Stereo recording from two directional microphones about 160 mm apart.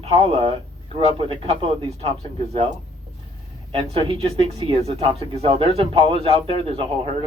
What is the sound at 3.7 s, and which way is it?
Speech, 35° right (ahead or behind).